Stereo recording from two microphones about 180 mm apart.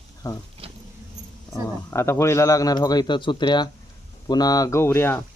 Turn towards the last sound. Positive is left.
turn(degrees=15)  # may be behind; listen again after turning